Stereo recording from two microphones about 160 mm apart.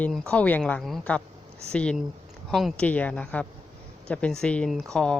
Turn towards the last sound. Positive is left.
turn(degrees=5)  # may be behind; listen again after turning